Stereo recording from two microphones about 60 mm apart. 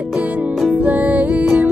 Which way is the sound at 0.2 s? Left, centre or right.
Right.